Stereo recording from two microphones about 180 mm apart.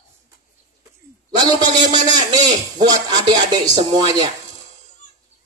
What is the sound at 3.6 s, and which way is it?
Speech, 40° right (ahead or behind).